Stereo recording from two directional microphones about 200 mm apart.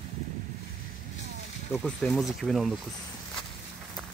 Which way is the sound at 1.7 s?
Centre (ahead or behind).